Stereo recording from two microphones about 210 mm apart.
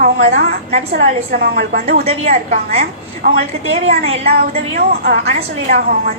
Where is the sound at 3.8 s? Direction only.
30° right (ahead or behind).